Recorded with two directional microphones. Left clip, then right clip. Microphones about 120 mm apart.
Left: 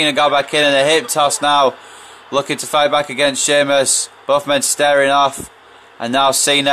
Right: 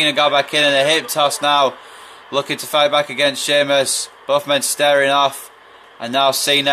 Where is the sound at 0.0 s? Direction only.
45° left (ahead or behind).